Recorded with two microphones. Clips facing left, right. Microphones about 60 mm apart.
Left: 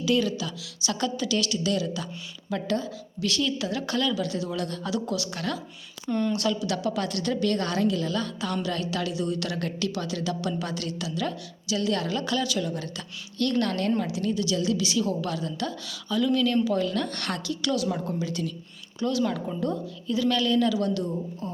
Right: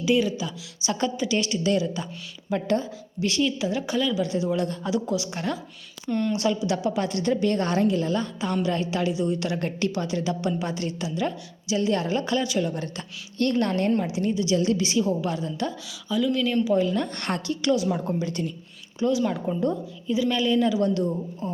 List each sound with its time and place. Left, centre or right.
0.0 s speech: centre
6.1 s a woman's voice: centre
6.3 s a woman's voice: right
16.0 s speech: centre; by 18.0 s right
18.2 s a woman's voice: right
18.9 s speech: centre